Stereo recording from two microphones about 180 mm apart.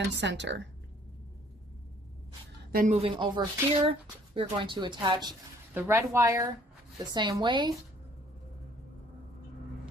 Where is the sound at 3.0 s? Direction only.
25° right (ahead or behind).